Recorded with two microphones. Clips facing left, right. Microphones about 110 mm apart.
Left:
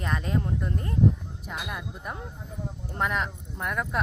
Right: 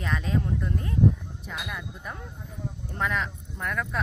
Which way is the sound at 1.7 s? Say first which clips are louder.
Left 1 dB; 15° left (ahead or behind).